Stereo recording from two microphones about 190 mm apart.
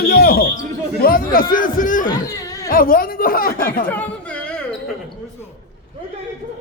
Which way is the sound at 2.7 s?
50° left (ahead or behind).